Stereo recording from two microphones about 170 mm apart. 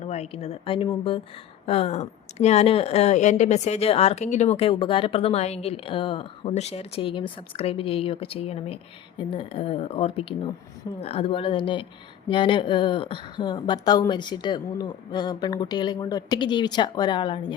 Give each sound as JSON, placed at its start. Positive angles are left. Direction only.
{"t": 0.0, "sound": "a woman's voice", "side_deg": 40}